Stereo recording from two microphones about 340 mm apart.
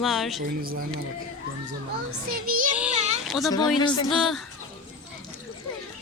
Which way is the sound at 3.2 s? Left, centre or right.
Centre.